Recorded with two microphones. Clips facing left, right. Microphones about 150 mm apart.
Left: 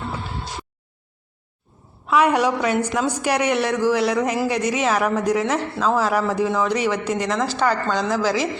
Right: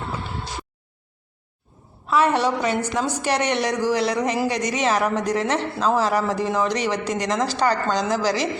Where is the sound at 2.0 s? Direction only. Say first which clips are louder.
Left 2 dB; 10° left (ahead or behind).